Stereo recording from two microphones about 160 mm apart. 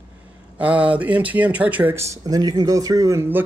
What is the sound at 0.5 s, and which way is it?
Speech, 10° right (ahead or behind).